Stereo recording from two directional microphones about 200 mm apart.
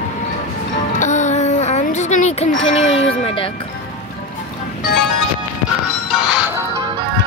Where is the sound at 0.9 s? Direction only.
35° left (ahead or behind).